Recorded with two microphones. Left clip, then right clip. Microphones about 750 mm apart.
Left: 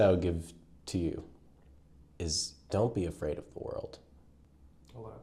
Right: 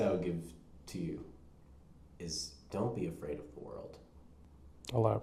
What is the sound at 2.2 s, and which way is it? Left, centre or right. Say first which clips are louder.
Speech: left 7 dB; left.